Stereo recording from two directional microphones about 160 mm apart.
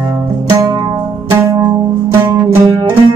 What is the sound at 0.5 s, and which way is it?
Music, 25° right (ahead or behind).